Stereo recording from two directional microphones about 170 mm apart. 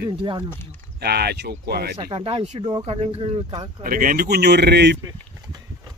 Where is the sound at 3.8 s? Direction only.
55° right (ahead or behind); by 5.0 s 85° right.